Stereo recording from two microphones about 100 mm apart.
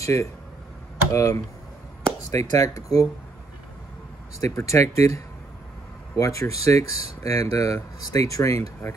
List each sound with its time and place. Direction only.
0.0 s speech: 30° left (ahead or behind)
4.4 s speech: 30° left (ahead or behind)